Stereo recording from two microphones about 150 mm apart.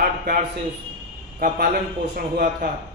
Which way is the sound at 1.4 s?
75° right (ahead or behind).